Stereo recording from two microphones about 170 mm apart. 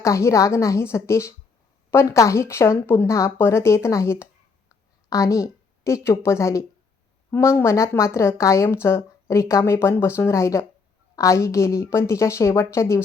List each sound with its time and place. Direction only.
0.0 s a woman's voice: 15° left (ahead or behind)